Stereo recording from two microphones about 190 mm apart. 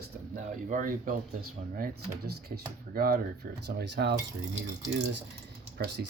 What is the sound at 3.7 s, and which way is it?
Speech, 65° right (ahead or behind).